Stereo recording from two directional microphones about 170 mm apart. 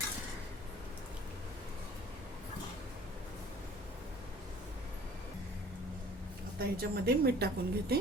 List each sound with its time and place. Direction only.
6.6 s a woman's voice: 65° right (ahead or behind)